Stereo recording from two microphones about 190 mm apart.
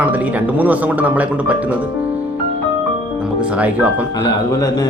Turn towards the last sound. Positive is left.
turn(degrees=20)  # may be behind; listen again after turning